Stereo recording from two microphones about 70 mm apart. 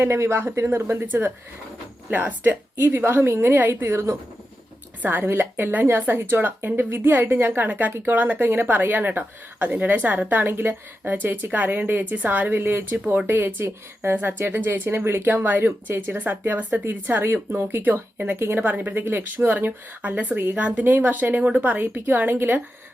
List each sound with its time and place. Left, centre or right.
0.0 s a woman's voice: right
1.0 s a woman's voice: right